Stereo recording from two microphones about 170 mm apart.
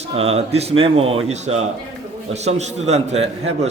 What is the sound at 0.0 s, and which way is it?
A man's voice, 35° right (ahead or behind).